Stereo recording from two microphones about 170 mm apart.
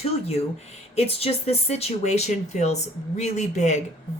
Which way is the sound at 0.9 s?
35° left (ahead or behind).